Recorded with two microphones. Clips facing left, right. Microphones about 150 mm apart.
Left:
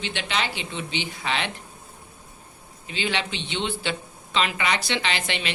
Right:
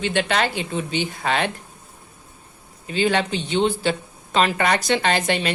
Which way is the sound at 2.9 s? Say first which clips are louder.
Right 8 dB; 45° right (ahead or behind).